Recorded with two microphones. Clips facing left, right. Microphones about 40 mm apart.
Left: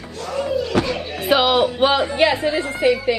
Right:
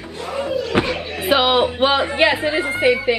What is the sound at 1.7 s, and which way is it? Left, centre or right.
A child's voice, centre.